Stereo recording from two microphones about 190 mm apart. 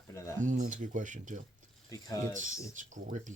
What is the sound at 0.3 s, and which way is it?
Speech, 40° right (ahead or behind).